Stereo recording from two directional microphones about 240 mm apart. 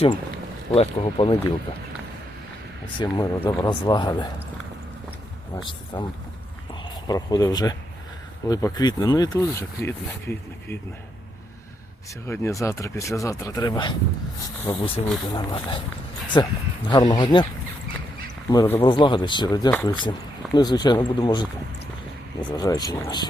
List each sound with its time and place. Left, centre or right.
0.7 s speech: left
3.0 s speech: centre
5.5 s speech: centre
7.1 s speech: centre
12.2 s speech: centre
18.5 s speech: centre
22.4 s speech: centre